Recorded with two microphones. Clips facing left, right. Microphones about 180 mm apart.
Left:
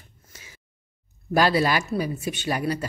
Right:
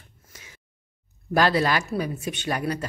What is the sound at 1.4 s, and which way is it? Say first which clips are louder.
Speech: left 1 dB; 10° left (ahead or behind).